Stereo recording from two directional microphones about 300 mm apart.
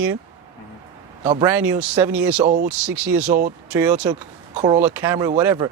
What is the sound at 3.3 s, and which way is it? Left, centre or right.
Speech, right.